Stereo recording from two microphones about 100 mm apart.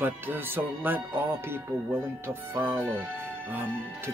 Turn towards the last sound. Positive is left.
turn(degrees=-20)  # may be behind; listen again after turning